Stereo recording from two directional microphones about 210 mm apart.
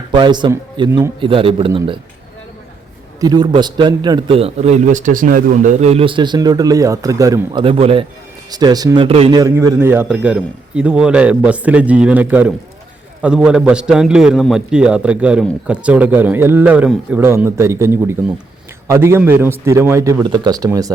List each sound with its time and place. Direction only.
0.1 s a man's voice: 20° right (ahead or behind)
1.2 s a man's voice: 25° right (ahead or behind)
3.2 s a man's voice: 20° right (ahead or behind)
9.4 s a man's voice: 15° right (ahead or behind)